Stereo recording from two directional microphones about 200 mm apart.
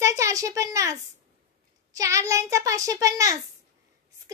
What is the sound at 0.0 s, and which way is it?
Speech, 15° right (ahead or behind).